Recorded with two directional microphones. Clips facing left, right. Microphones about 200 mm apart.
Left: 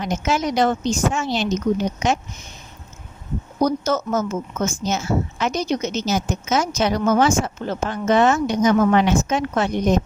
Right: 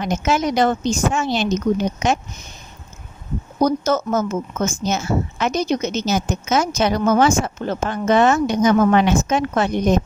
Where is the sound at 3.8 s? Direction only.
50° right (ahead or behind).